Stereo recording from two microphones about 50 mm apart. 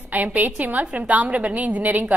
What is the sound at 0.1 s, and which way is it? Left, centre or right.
A woman's voice, right.